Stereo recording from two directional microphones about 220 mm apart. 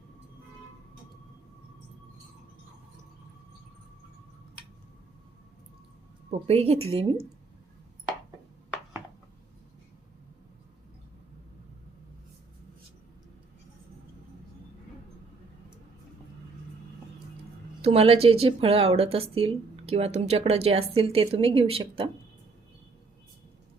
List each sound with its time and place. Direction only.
6.5 s a woman's voice: 25° right (ahead or behind)
17.8 s a woman's voice: 25° right (ahead or behind)